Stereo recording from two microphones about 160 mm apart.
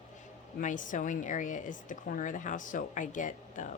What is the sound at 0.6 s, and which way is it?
Speech, 55° left (ahead or behind).